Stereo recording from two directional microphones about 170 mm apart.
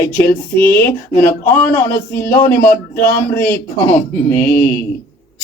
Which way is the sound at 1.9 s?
60° left (ahead or behind).